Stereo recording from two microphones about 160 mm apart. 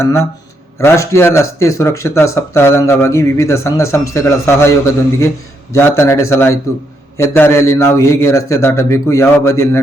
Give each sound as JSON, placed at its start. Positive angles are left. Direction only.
{"t": 0.0, "sound": "speech", "side_deg": 15}
{"t": 5.7, "sound": "speech", "side_deg": 15}